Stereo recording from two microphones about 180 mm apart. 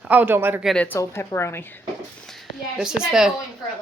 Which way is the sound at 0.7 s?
10° left (ahead or behind).